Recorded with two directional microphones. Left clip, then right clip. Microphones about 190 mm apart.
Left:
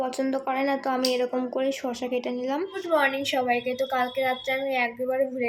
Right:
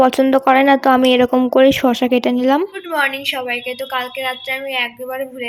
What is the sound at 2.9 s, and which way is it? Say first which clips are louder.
A woman's voice: right 4 dB; 10° left (ahead or behind).